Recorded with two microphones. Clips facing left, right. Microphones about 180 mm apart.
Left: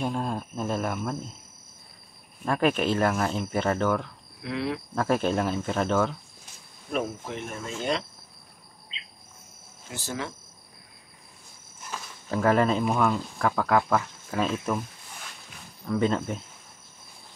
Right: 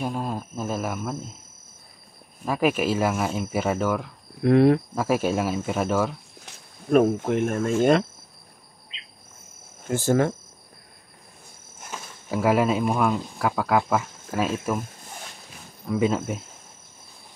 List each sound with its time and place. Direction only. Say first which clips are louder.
0.0 s speech: right 1 dB; 5° right (ahead or behind)
2.4 s speech: right 1 dB; 5° right (ahead or behind)
4.4 s speech: right 13 dB; 50° right (ahead or behind)
4.9 s speech: right 2 dB; 5° right (ahead or behind)
7.2 s speech: right 12 dB; 50° right (ahead or behind)
9.8 s speech: right 13 dB; 50° right (ahead or behind)
12.3 s speech: right 1 dB; 10° right (ahead or behind)
15.9 s speech: right 2 dB; 5° right (ahead or behind)